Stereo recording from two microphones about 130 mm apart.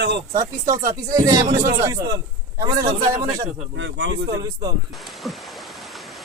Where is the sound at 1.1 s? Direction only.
30° right (ahead or behind).